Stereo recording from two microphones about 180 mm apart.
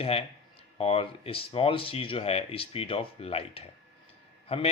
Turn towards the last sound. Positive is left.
turn(degrees=35)  # may be behind; listen again after turning